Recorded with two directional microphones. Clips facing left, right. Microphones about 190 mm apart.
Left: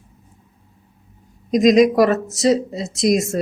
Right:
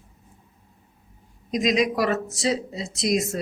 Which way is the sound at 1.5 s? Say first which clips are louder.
Left 9 dB; 45° left (ahead or behind).